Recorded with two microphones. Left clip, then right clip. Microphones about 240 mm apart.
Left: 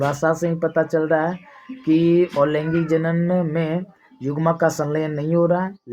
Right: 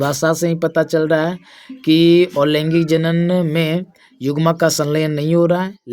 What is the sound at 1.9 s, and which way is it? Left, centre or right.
Speech, right.